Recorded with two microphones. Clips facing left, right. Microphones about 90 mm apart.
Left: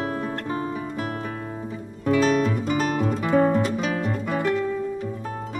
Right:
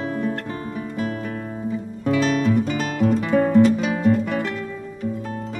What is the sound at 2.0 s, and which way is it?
Guitar, 40° left (ahead or behind).